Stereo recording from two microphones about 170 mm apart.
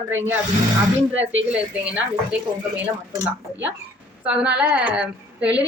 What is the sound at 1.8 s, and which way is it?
Speech, 5° right (ahead or behind).